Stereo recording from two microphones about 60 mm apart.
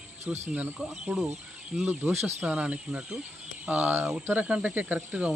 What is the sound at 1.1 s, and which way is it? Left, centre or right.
Speech, right.